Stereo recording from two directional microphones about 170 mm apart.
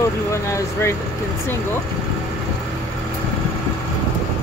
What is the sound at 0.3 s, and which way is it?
Speech, 15° left (ahead or behind).